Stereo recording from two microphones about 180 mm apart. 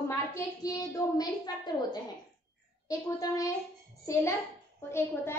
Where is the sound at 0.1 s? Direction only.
15° left (ahead or behind).